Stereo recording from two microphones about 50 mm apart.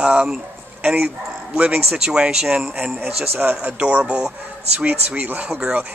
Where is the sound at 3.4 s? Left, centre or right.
Right; by 4.9 s centre.